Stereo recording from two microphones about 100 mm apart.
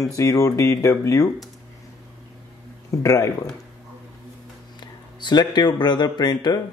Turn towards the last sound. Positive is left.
turn(degrees=40)  # may be behind; listen again after turning